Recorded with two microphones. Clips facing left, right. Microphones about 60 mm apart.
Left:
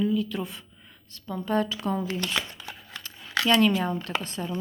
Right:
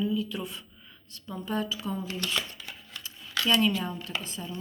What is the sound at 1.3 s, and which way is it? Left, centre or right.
Speech, left.